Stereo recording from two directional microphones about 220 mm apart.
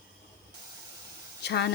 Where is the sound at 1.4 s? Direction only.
50° left (ahead or behind).